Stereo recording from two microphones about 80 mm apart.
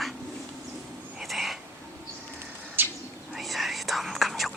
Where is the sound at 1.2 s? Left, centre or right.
Centre.